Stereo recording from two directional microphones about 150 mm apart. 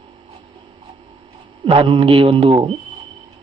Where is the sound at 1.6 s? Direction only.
40° right (ahead or behind).